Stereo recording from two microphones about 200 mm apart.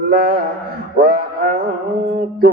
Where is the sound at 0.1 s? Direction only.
50° right (ahead or behind).